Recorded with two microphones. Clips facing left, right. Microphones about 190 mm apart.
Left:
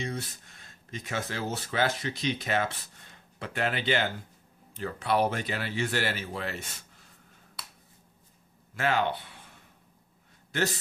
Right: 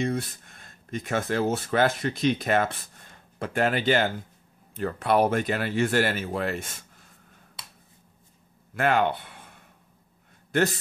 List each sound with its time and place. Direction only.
0.0 s speech: 55° right (ahead or behind)
8.7 s speech: 55° right (ahead or behind)